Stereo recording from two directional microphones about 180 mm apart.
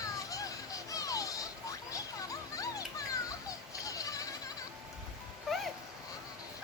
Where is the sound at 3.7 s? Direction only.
20° left (ahead or behind).